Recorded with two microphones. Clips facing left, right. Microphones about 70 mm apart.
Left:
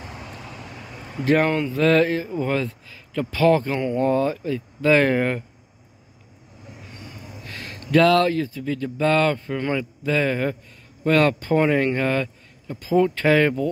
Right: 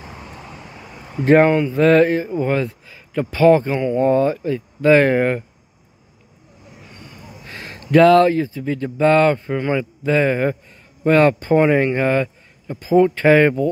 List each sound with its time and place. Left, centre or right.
0.2 s vehicle: right
0.7 s a sound: centre
1.2 s speech: right
3.8 s speech: centre
7.0 s a sound: centre
7.4 s speech: right